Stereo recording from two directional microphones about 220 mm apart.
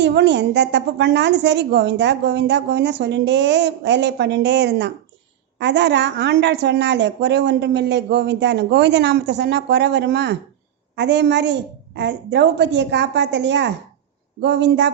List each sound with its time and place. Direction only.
0.0 s a woman's voice: 50° right (ahead or behind)